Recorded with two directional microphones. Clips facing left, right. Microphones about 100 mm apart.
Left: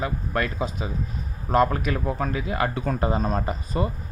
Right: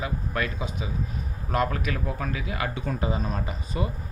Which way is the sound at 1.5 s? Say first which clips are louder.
Left 5 dB; 30° left (ahead or behind).